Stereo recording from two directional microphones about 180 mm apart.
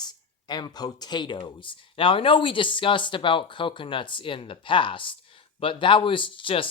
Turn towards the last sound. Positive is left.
turn(degrees=30)  # may be behind; listen again after turning